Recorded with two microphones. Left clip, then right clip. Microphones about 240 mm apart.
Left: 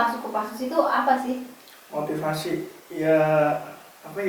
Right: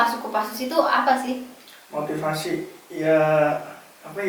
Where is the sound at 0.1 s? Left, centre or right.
Centre.